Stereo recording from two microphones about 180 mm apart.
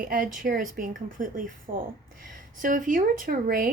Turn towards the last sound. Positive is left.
turn(degrees=-50)  # may be behind; listen again after turning